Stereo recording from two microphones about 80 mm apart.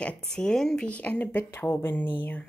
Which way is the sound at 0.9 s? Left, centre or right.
Centre.